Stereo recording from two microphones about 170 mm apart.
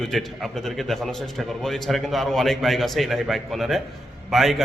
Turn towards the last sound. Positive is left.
turn(degrees=0)  # may be behind; listen again after turning